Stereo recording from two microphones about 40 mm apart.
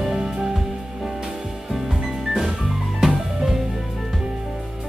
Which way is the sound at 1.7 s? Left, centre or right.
Centre.